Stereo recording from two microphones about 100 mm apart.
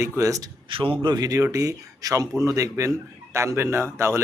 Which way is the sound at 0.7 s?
60° right (ahead or behind).